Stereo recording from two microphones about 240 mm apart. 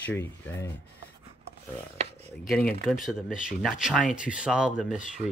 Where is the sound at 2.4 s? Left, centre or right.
Centre.